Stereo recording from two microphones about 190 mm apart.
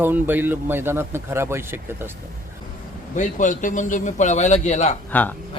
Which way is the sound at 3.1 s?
40° left (ahead or behind).